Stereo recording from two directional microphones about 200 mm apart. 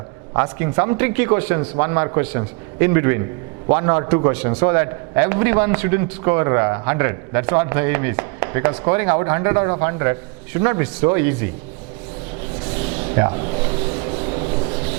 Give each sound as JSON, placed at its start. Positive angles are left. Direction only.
{"t": 0.3, "sound": "a man's voice", "side_deg": -15}
{"t": 12.9, "sound": "a sound", "side_deg": -40}
{"t": 13.1, "sound": "speech", "side_deg": -20}
{"t": 13.9, "sound": "rub", "side_deg": -30}